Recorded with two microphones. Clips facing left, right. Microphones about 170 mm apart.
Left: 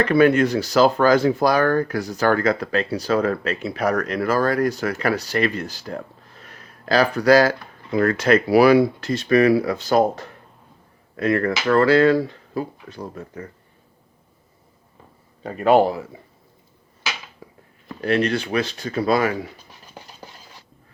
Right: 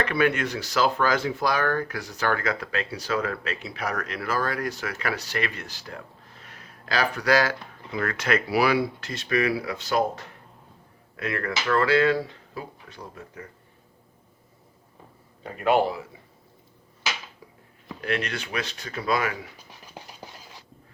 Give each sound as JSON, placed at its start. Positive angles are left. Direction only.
{"t": 0.0, "sound": "speech", "side_deg": 40}
{"t": 15.4, "sound": "speech", "side_deg": 40}
{"t": 18.0, "sound": "speech", "side_deg": 30}